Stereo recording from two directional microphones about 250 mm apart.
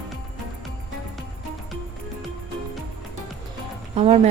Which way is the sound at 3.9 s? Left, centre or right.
Right.